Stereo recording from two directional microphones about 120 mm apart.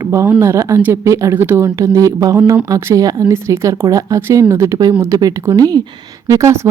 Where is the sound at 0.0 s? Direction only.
25° right (ahead or behind).